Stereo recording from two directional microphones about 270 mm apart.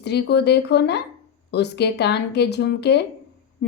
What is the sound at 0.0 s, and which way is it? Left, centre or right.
A woman's voice, left.